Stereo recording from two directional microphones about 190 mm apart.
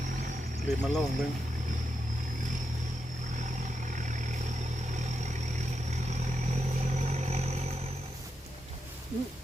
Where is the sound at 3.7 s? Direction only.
40° right (ahead or behind).